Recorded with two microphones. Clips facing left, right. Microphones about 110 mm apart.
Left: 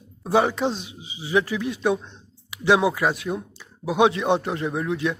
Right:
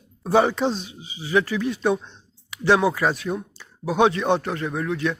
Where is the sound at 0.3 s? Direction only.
5° left (ahead or behind).